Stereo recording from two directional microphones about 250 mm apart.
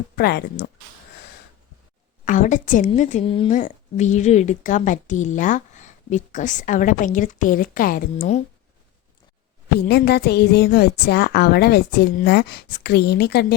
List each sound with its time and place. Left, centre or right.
0.2 s speech: left
2.2 s a woman's voice: left
9.7 s speech: left